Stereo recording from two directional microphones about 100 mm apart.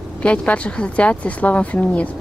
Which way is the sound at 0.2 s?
15° left (ahead or behind).